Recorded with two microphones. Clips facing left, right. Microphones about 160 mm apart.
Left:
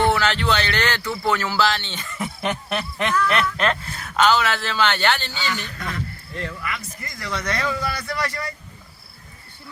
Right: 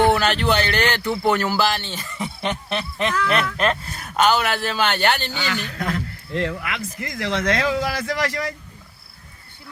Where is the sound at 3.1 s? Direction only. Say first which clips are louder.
Left 1 dB; 30° right (ahead or behind).